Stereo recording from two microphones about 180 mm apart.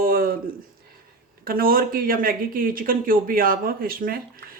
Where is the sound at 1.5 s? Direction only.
55° right (ahead or behind).